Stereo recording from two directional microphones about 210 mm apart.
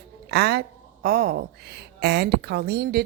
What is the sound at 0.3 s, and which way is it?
A woman's voice, 50° right (ahead or behind).